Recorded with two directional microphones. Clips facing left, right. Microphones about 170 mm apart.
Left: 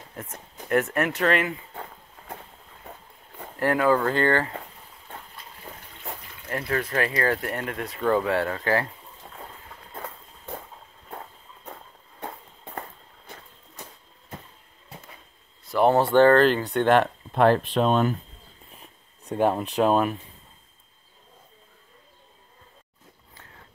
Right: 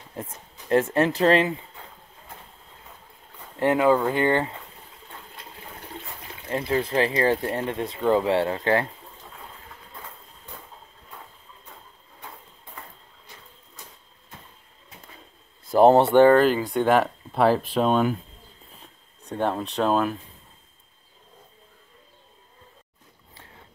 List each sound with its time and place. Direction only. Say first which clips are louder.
0.1 s speech: right 4 dB; 25° right (ahead or behind)
1.7 s a sound: left 6 dB; 60° left (ahead or behind)
3.5 s speech: right 2 dB; 20° right (ahead or behind)
6.5 s speech: right 3 dB; 25° right (ahead or behind)
9.9 s a sound: left 7 dB; 50° left (ahead or behind)
12.2 s a sound: left 7 dB; 60° left (ahead or behind)
15.6 s speech: right 5 dB; 40° right (ahead or behind)
16.0 s speech: right 1 dB; 15° right (ahead or behind)
19.2 s speech: left 3 dB; 10° left (ahead or behind)